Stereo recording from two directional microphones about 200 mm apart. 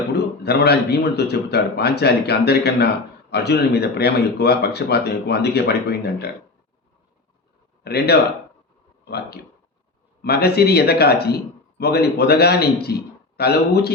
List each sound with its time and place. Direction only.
0.4 s a man's voice: 55° left (ahead or behind)
7.9 s a man's voice: 50° left (ahead or behind)